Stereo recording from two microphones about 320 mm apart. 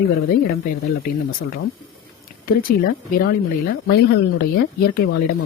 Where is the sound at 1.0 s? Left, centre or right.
Left.